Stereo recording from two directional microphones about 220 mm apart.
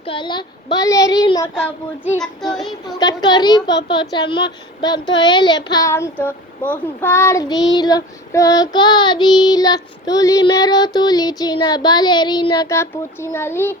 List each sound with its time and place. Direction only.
0.0 s a child's voice: 20° left (ahead or behind)
2.5 s child singing: centre (ahead or behind)
3.0 s a child's voice: 20° left (ahead or behind)
7.7 s child singing: 20° left (ahead or behind)